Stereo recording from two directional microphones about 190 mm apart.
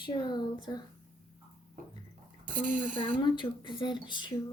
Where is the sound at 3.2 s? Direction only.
25° left (ahead or behind).